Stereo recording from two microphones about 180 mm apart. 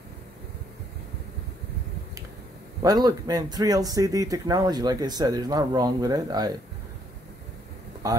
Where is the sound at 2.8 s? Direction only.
20° right (ahead or behind).